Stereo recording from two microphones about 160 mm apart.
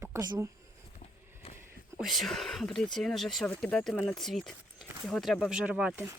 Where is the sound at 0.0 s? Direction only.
20° right (ahead or behind).